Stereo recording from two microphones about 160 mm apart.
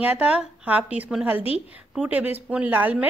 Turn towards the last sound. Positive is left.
turn(degrees=-10)  # may be behind; listen again after turning